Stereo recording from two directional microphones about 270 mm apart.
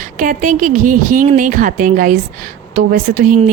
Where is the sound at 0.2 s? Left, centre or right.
Right.